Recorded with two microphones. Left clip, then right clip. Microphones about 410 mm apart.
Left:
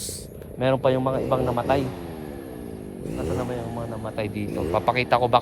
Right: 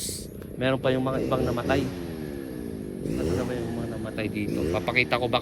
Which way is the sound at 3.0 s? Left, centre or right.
Centre.